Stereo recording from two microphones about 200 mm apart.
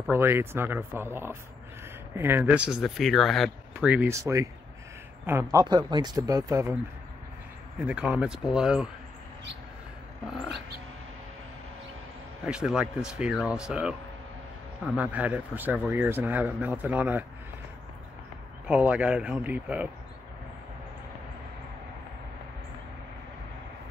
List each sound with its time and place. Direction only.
0.1 s speech: 10° right (ahead or behind)
7.8 s speech: 5° right (ahead or behind)
12.4 s speech: 5° right (ahead or behind)
15.0 s speech: 5° right (ahead or behind)
18.7 s speech: 5° right (ahead or behind)